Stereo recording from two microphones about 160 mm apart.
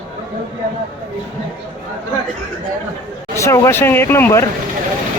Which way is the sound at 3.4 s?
20° left (ahead or behind).